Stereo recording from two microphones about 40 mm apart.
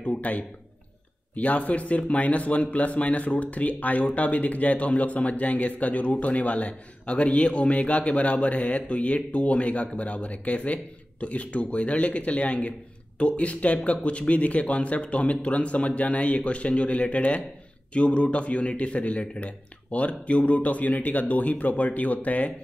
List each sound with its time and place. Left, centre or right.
0.2 s speech: left